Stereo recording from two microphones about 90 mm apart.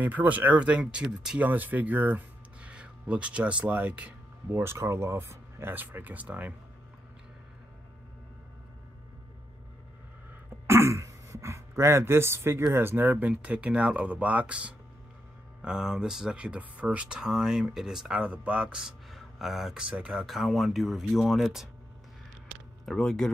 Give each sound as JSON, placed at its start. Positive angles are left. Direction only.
{"t": 0.0, "sound": "speech", "side_deg": -20}
{"t": 10.7, "sound": "throat clearing", "side_deg": -35}
{"t": 12.7, "sound": "speech", "side_deg": -25}
{"t": 22.8, "sound": "speech", "side_deg": 5}